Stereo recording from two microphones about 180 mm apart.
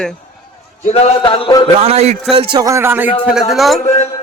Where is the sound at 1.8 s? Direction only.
35° right (ahead or behind).